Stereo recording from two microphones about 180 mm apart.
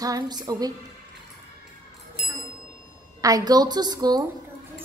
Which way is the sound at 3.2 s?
20° right (ahead or behind).